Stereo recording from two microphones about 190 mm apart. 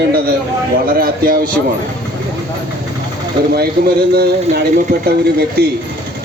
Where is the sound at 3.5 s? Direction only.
55° right (ahead or behind).